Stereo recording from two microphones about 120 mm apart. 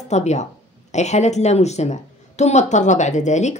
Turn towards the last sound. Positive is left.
turn(degrees=75)  # may be behind; listen again after turning